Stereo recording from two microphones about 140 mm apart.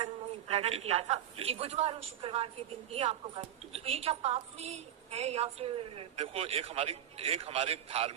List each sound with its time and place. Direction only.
0.0 s a man's voice: 50° right (ahead or behind)